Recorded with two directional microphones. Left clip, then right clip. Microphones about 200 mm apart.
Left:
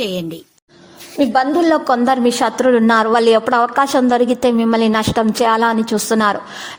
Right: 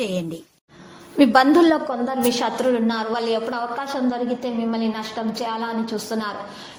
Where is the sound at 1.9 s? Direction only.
35° left (ahead or behind).